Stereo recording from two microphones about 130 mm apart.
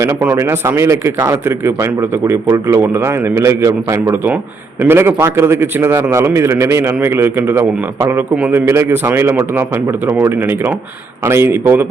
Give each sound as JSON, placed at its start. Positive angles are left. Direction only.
{"t": 0.0, "sound": "a man's voice", "side_deg": -15}